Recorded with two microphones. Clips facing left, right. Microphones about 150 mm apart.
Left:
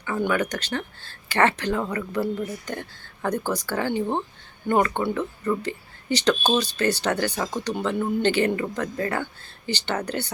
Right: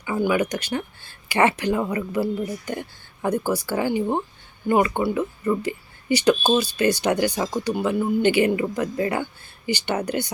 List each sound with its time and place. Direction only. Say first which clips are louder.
0.0 s speech: right 2 dB; 10° right (ahead or behind)